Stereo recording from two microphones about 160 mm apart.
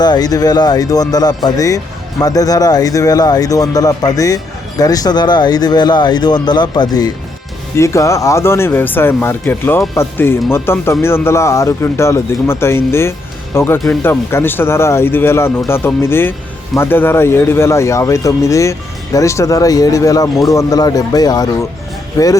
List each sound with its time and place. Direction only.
0.0 s speech: 25° left (ahead or behind)